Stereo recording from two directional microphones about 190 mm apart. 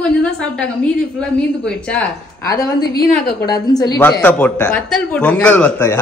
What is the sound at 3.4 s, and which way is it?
Speech, 20° left (ahead or behind).